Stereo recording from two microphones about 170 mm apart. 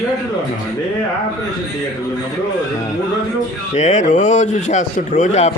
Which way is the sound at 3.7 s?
45° left (ahead or behind).